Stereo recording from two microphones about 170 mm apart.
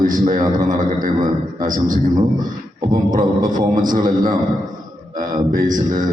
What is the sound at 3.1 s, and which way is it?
A man's voice, 50° right (ahead or behind).